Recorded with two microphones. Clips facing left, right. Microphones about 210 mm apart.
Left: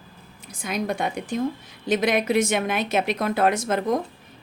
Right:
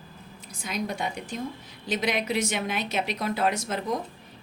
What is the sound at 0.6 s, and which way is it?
A woman's voice, 55° left (ahead or behind).